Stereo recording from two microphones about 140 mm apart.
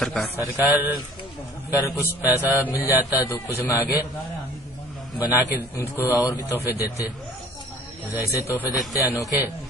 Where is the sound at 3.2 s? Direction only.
20° left (ahead or behind).